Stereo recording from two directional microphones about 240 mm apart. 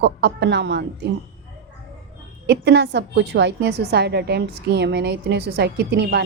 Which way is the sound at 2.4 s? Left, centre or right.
Right.